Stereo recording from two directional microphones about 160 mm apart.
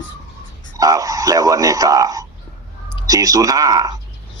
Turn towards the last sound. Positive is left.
turn(degrees=-20)  # may be behind; listen again after turning